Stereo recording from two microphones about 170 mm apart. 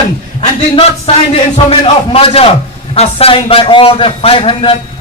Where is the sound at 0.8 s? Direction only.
35° left (ahead or behind).